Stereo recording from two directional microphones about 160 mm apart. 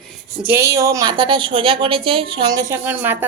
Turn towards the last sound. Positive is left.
turn(degrees=-15)  # may be behind; listen again after turning